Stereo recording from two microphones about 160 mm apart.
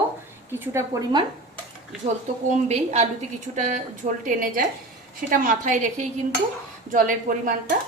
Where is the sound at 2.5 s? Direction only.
45° right (ahead or behind).